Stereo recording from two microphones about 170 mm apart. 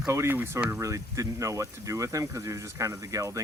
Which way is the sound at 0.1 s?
15° right (ahead or behind).